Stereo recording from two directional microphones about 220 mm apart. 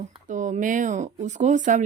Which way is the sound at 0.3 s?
35° right (ahead or behind).